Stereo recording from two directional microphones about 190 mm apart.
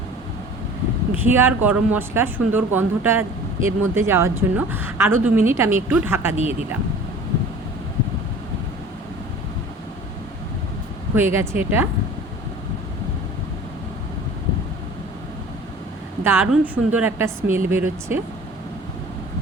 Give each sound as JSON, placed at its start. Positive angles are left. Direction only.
{"t": 1.1, "sound": "speech", "side_deg": -10}
{"t": 11.1, "sound": "speech", "side_deg": -10}
{"t": 16.2, "sound": "speech", "side_deg": -10}